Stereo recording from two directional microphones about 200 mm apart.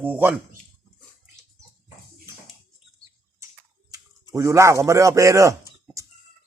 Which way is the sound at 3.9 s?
20° right (ahead or behind).